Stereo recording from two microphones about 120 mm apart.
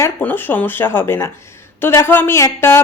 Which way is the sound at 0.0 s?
15° left (ahead or behind).